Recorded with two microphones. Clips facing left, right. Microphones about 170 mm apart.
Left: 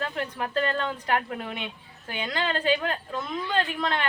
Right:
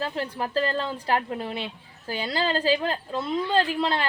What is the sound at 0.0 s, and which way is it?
A woman's voice, 30° right (ahead or behind).